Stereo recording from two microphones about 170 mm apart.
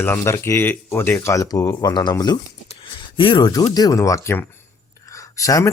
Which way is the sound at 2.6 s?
30° left (ahead or behind).